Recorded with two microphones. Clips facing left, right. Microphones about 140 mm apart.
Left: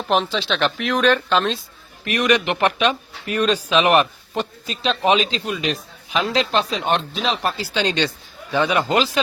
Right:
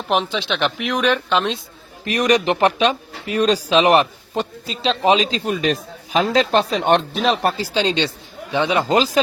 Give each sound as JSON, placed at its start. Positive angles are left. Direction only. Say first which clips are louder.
{"t": 0.1, "sound": "a woman's voice", "louder": "even", "side_deg": -15}
{"t": 2.0, "sound": "a man's voice", "louder": "right 2 dB", "side_deg": -35}
{"t": 8.9, "sound": "speech", "louder": "right 3 dB", "side_deg": -35}